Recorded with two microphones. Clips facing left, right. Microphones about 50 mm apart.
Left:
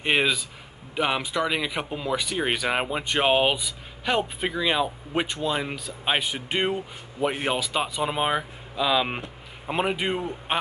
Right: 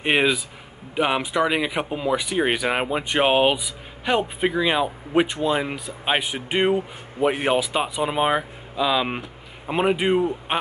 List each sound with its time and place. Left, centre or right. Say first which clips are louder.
0.0 s speech: right 3 dB; centre